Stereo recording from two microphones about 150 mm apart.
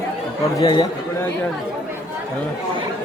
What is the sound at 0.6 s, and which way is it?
Speech, 30° left (ahead or behind).